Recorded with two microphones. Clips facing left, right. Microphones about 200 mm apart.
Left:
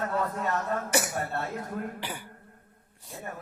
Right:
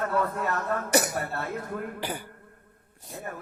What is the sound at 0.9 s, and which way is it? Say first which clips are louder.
Speech: right 6 dB; 40° right (ahead or behind).